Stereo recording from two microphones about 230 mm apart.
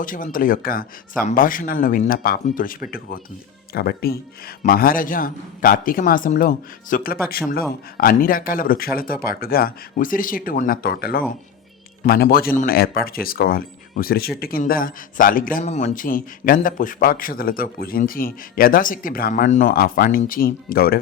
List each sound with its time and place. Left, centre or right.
0.0 s speech: left